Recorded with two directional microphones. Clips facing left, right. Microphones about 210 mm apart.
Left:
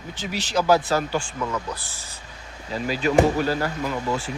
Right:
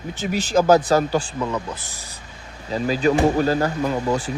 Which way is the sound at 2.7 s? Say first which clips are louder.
Right 1 dB; 45° right (ahead or behind).